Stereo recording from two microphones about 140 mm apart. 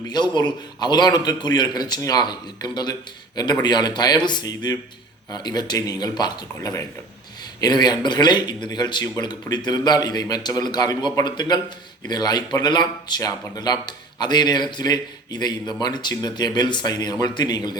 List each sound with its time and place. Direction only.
0.1 s speech: 30° left (ahead or behind)